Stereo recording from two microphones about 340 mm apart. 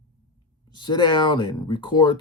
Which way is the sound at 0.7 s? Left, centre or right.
Centre.